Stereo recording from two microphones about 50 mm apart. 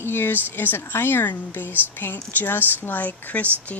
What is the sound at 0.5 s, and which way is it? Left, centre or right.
Speech, left.